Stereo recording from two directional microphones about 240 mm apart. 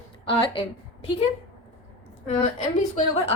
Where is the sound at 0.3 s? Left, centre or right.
Left.